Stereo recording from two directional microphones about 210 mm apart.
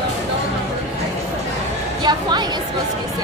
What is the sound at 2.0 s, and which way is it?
Speech, 20° right (ahead or behind).